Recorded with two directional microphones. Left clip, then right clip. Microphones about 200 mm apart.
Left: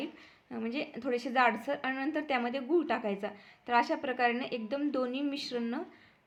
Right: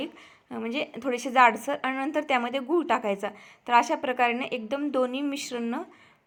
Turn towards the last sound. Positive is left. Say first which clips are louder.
# right 4 dB
turn(degrees=-20)  # may be behind; listen again after turning